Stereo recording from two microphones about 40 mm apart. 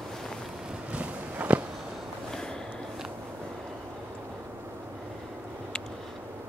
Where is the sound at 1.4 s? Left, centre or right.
Right.